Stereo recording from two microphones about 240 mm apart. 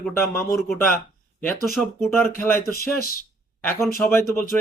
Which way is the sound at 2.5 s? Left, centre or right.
Left.